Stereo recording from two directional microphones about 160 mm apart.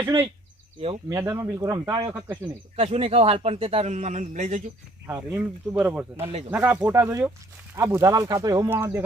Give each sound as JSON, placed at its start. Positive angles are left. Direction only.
{"t": 1.1, "sound": "speech", "side_deg": -15}
{"t": 2.7, "sound": "a man's voice", "side_deg": -35}
{"t": 5.0, "sound": "speech", "side_deg": -15}